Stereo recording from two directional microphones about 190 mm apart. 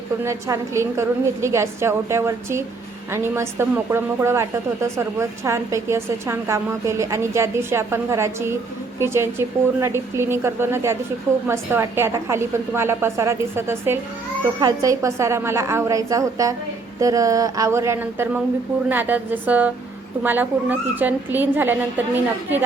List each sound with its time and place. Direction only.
0.3 s a woman's voice: 15° right (ahead or behind)